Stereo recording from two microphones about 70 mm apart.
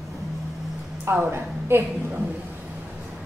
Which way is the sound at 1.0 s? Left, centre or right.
Right.